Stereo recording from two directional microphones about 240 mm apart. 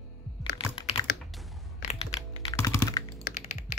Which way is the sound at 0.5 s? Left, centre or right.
Left.